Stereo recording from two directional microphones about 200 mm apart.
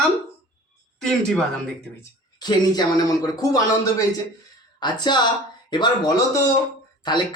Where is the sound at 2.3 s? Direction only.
20° left (ahead or behind).